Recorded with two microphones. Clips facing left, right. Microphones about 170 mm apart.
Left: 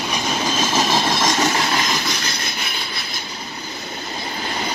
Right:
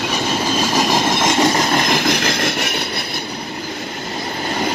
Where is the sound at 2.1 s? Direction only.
90° right.